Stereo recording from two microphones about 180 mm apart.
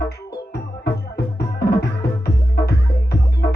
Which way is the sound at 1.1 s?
65° left (ahead or behind).